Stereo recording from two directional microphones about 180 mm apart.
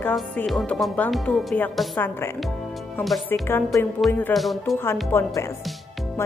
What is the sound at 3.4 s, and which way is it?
Speech, 15° left (ahead or behind).